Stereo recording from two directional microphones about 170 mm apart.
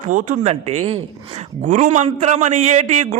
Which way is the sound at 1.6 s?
45° right (ahead or behind).